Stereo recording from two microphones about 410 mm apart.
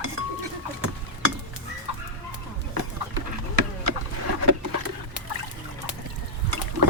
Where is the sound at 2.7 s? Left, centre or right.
Right.